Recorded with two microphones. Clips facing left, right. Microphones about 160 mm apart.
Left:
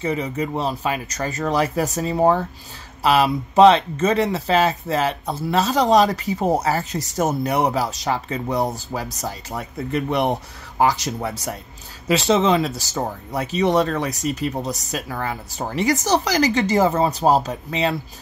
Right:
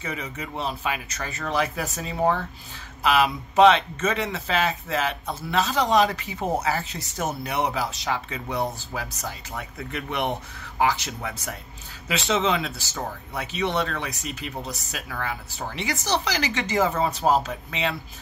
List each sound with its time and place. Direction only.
0.0 s speech: 35° left (ahead or behind)